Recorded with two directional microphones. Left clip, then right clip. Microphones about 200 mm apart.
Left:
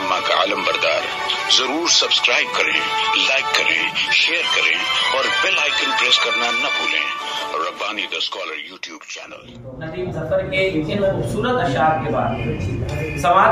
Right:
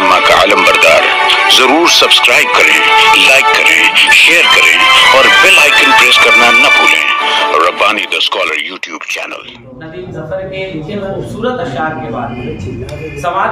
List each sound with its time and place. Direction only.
0.0 s speech: 40° right (ahead or behind)